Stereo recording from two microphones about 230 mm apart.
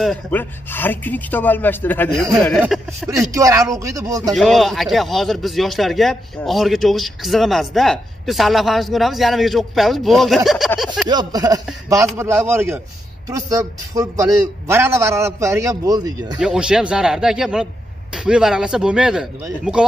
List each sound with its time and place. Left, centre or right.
0.0 s a man's voice: centre
3.3 s a man's voice: centre
4.3 s a man's voice: centre
11.1 s a man's voice: centre
16.3 s a man's voice: centre